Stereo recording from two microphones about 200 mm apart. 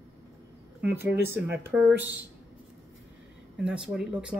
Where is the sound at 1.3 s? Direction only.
10° right (ahead or behind).